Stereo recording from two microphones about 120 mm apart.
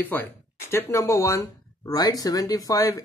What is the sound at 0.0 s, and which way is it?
Speech, 15° left (ahead or behind).